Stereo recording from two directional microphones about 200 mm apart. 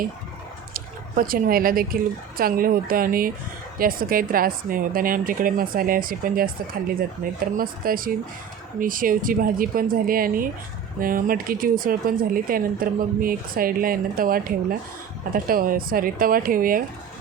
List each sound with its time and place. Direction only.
0.7 s speech: 45° right (ahead or behind)